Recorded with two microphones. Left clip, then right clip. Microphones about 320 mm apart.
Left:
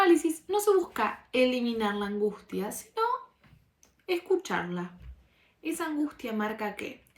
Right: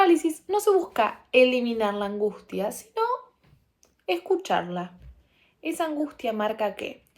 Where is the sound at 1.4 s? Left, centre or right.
Right.